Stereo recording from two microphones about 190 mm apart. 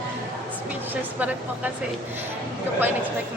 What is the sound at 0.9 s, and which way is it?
Speech, 10° right (ahead or behind).